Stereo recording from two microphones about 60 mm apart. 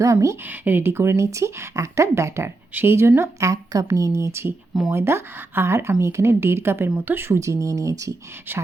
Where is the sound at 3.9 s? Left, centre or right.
Right.